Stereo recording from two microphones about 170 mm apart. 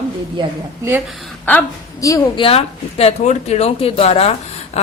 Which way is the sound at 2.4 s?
35° left (ahead or behind).